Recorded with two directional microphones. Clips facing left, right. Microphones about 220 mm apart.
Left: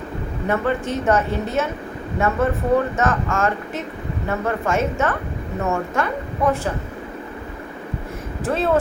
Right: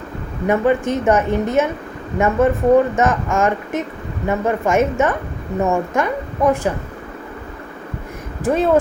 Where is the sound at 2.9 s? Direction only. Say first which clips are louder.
Right 4 dB; 15° right (ahead or behind).